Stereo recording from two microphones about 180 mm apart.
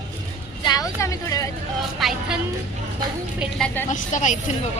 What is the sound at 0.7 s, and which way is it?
Speech, 20° left (ahead or behind).